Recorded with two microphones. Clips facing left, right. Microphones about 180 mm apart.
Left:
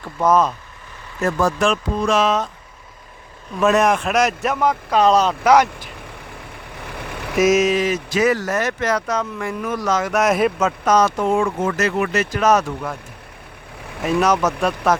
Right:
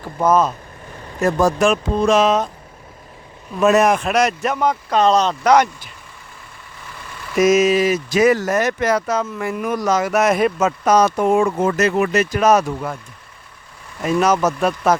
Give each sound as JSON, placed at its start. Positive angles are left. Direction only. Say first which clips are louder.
{"t": 0.2, "sound": "speech", "louder": "right 1 dB", "side_deg": 0}
{"t": 1.2, "sound": "speech", "louder": "right 3 dB", "side_deg": -15}
{"t": 3.6, "sound": "speech", "louder": "right 2 dB", "side_deg": -5}
{"t": 6.7, "sound": "vehicle", "louder": "left 6 dB", "side_deg": 60}
{"t": 7.3, "sound": "speech", "louder": "right 2 dB", "side_deg": 0}
{"t": 12.1, "sound": "speech", "louder": "right 1 dB", "side_deg": -15}
{"t": 14.0, "sound": "speech", "louder": "right 1 dB", "side_deg": 0}